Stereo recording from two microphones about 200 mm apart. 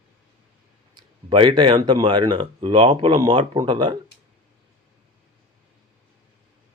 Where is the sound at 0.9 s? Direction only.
25° right (ahead or behind).